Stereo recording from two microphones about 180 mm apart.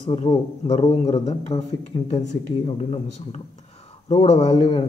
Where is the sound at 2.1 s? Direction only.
35° left (ahead or behind).